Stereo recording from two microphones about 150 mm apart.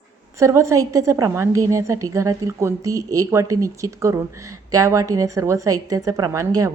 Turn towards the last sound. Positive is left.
turn(degrees=-20)  # may be behind; listen again after turning